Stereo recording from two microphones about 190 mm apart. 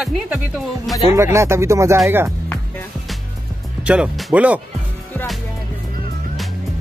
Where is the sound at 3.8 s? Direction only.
5° right (ahead or behind).